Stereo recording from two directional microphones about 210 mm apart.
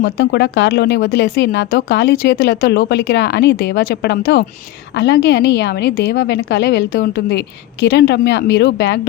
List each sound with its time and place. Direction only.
0.0 s a woman's voice: 55° left (ahead or behind)